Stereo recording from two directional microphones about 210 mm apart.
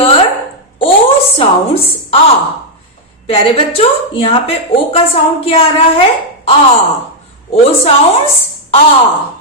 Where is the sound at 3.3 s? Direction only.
25° left (ahead or behind).